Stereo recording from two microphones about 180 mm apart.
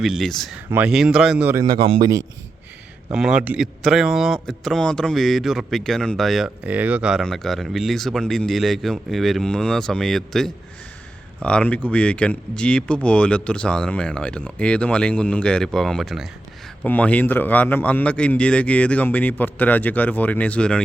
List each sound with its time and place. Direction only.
0.0 s a man's voice: centre (ahead or behind)
1.8 s a man's voice: 30° right (ahead or behind)
3.1 s a man's voice: 5° right (ahead or behind)